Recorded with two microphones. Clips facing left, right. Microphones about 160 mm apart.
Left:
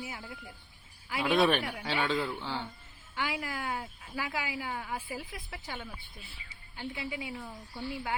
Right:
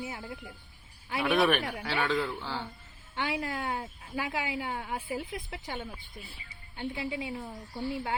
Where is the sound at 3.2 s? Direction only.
25° right (ahead or behind).